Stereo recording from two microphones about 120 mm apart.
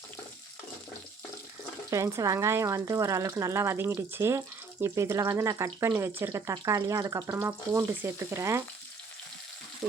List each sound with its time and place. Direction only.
1.9 s speech: 25° right (ahead or behind)